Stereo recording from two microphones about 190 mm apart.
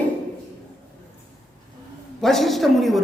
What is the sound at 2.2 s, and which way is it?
Speech, centre (ahead or behind).